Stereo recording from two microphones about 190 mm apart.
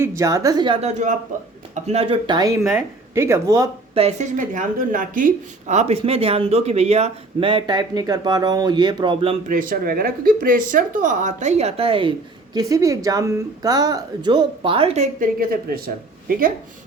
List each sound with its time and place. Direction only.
0.0 s a woman's voice: 15° right (ahead or behind)
3.9 s speech: 35° right (ahead or behind)
9.5 s speech: 45° right (ahead or behind); by 12.1 s 30° right (ahead or behind)
12.5 s a woman's voice: 20° right (ahead or behind)
15.2 s speech: 50° right (ahead or behind)